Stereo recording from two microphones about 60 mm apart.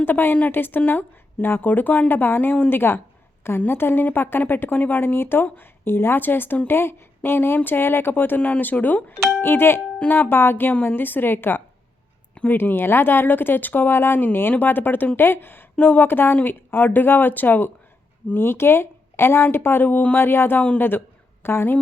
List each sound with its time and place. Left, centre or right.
0.0 s speech: left
8.4 s speech: left
18.3 s speech: left
20.1 s speech: left